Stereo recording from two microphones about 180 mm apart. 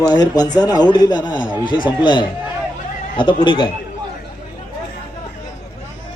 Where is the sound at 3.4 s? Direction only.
25° left (ahead or behind).